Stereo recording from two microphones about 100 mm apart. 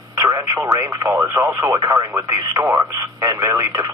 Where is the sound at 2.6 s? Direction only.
20° right (ahead or behind).